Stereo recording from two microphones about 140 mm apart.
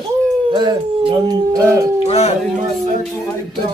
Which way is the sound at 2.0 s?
50° left (ahead or behind).